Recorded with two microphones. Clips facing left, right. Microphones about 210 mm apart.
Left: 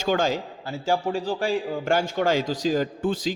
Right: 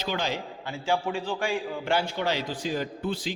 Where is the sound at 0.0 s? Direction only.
45° left (ahead or behind).